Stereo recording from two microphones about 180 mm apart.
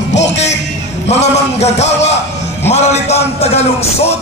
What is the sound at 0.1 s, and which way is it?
Music, 80° left.